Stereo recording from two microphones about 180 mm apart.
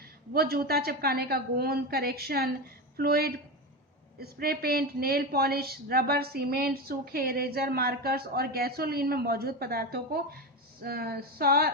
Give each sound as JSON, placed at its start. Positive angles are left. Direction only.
{"t": 0.3, "sound": "speech", "side_deg": -60}